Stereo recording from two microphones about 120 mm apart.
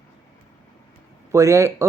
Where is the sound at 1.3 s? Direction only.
25° right (ahead or behind).